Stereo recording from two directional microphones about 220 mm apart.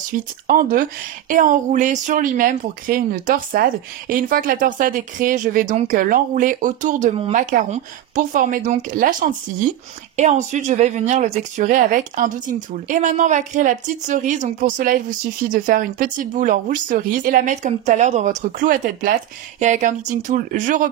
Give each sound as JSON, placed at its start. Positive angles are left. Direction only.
{"t": 0.1, "sound": "speech", "side_deg": -40}